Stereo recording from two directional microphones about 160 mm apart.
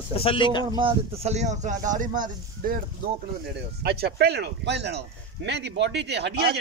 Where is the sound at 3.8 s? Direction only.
85° right.